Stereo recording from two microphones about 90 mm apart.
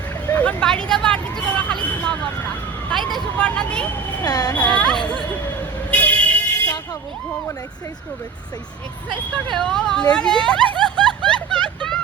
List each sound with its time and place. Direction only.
0.3 s vehicle: 15° left (ahead or behind)
3.3 s speech: 10° left (ahead or behind)
4.2 s speech: 45° left (ahead or behind)
4.5 s speech: 15° left (ahead or behind)
5.9 s vehicle: 15° left (ahead or behind)
9.5 s speech: 5° left (ahead or behind)
10.8 s a sound: 5° left (ahead or behind)